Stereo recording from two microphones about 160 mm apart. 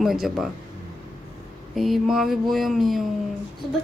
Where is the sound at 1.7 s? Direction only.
Centre (ahead or behind).